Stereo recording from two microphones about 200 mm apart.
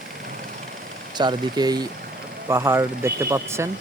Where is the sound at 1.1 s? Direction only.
20° right (ahead or behind).